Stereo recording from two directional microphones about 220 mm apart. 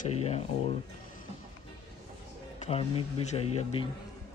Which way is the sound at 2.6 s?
25° left (ahead or behind).